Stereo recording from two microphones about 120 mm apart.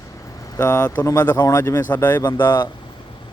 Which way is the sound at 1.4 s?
25° left (ahead or behind).